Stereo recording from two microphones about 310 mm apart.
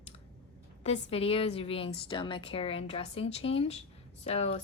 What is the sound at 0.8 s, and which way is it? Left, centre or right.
A woman's voice, centre.